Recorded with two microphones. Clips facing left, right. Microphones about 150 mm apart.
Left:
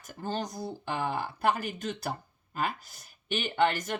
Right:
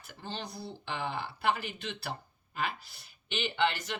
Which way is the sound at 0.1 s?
45° left (ahead or behind).